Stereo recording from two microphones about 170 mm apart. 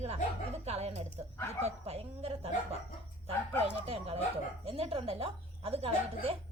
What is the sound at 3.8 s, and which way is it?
Speech, 35° right (ahead or behind).